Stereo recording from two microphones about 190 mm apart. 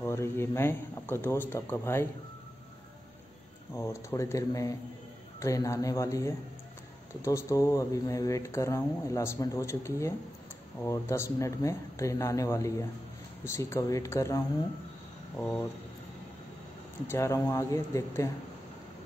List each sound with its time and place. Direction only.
0.0 s speech: 15° left (ahead or behind)
3.7 s speech: 15° left (ahead or behind)
17.1 s speech: 15° left (ahead or behind)